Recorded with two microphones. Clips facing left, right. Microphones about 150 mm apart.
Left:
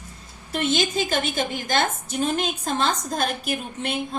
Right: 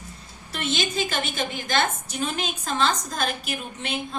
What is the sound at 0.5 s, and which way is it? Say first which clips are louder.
Speech: left 4 dB; 45° left (ahead or behind).